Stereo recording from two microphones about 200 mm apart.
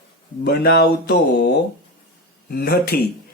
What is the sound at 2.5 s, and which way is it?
Mantra, 50° left (ahead or behind).